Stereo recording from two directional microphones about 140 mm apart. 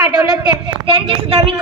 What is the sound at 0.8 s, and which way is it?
Speech, 40° right (ahead or behind).